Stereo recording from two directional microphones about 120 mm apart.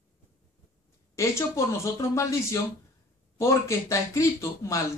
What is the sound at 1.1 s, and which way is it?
Speech, 25° left (ahead or behind).